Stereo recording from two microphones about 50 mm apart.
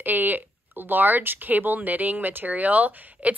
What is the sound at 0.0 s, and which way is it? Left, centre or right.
A woman's voice, right.